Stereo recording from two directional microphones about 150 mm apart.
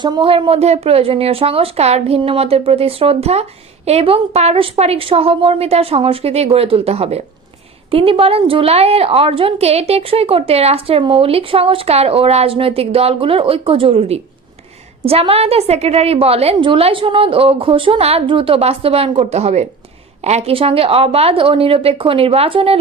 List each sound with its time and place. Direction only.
0.0 s a woman's voice: 30° right (ahead or behind)